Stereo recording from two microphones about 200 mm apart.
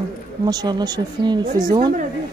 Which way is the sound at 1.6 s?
40° right (ahead or behind).